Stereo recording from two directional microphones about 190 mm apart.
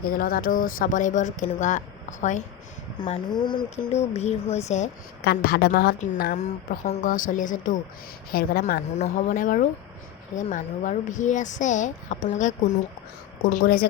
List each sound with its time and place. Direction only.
0.1 s speech: 50° left (ahead or behind)
3.0 s speech: 25° left (ahead or behind)
5.2 s a woman's voice: 55° left (ahead or behind)
6.3 s speech: 40° left (ahead or behind)